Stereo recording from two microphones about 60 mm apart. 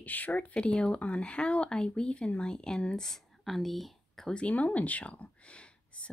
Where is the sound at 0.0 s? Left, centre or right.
Left; by 4.3 s centre.